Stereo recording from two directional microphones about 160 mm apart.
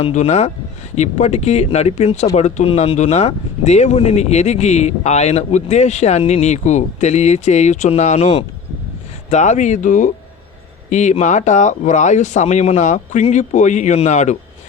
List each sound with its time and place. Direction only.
0.0 s speech: 45° left (ahead or behind)